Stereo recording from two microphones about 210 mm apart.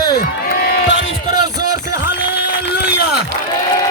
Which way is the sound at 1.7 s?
90° left.